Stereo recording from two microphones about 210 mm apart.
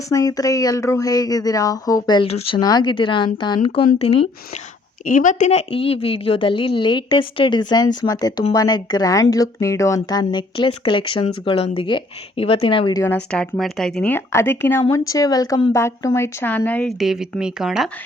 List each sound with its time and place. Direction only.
0.1 s a woman's voice: 15° left (ahead or behind)
5.0 s a woman's voice: 40° left (ahead or behind)
13.0 s speech: 10° left (ahead or behind)